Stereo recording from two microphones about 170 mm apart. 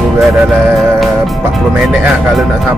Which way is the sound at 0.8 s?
Centre (ahead or behind).